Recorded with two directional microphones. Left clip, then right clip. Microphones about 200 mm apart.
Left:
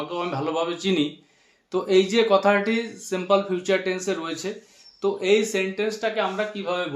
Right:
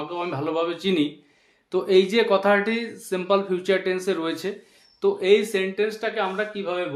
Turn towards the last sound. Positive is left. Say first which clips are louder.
# even
turn(degrees=-15)  # may be behind; listen again after turning